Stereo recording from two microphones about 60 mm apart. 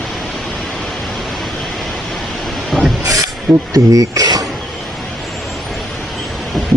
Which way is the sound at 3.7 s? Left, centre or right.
Right.